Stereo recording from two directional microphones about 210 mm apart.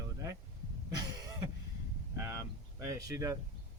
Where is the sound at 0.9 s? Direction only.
20° right (ahead or behind).